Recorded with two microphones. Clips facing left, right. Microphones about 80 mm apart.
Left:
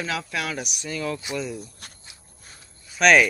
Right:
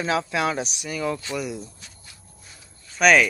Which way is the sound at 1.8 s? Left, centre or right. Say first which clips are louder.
Left 3 dB; left.